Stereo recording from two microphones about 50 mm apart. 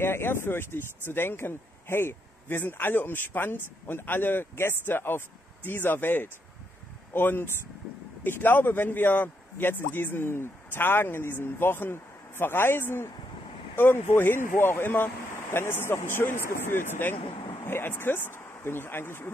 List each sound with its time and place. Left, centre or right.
0.0 s a man's voice: left
2.4 s a man's voice: left